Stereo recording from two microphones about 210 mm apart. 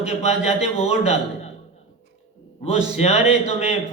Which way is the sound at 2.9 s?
30° left (ahead or behind).